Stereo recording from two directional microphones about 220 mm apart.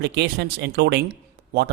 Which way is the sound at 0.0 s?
50° right (ahead or behind).